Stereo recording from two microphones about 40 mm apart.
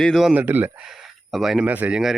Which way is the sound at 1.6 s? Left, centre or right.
Right.